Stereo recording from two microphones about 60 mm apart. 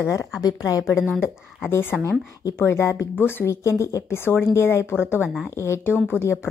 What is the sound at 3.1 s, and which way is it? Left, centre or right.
Speech, left.